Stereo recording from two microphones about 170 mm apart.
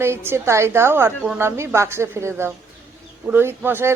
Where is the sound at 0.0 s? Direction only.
15° right (ahead or behind).